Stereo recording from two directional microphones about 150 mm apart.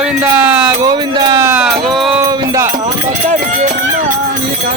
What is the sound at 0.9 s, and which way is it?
Speech, 30° right (ahead or behind).